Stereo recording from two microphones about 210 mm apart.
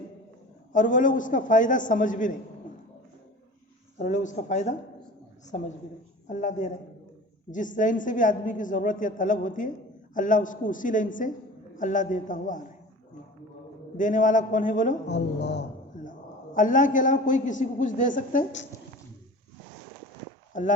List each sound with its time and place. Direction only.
0.7 s a woman's voice: 40° left (ahead or behind)
3.9 s a woman's voice: 40° left (ahead or behind)
6.2 s a woman's voice: 35° left (ahead or behind)
13.9 s a woman's voice: 40° left (ahead or behind)
15.0 s a woman's voice: 55° left (ahead or behind)
16.6 s a woman's voice: 40° left (ahead or behind)
20.5 s speech: 40° left (ahead or behind)